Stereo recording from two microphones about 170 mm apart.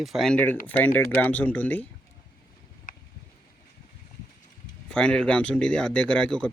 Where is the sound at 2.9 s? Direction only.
50° left (ahead or behind).